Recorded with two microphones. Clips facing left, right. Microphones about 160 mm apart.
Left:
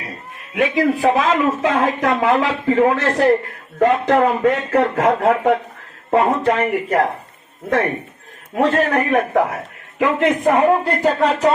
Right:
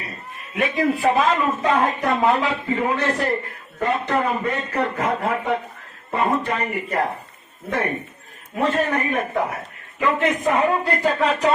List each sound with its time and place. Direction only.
0.5 s speech: 90° left
8.5 s speech: 90° left
10.0 s a man's voice: 75° left (ahead or behind)
10.8 s speech: 40° left (ahead or behind)